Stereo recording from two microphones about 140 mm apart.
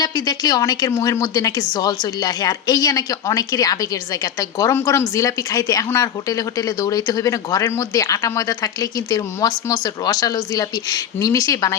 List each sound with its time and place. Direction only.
0.0 s a woman's voice: 25° left (ahead or behind)